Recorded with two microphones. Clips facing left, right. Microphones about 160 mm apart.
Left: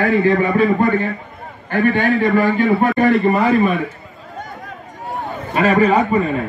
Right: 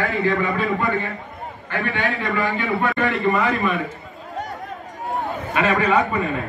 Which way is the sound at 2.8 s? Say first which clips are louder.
Left 5 dB; 40° left (ahead or behind).